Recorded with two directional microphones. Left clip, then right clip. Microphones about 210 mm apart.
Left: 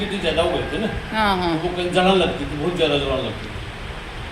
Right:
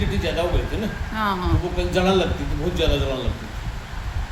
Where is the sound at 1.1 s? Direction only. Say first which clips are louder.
Left 4 dB; 15° right (ahead or behind).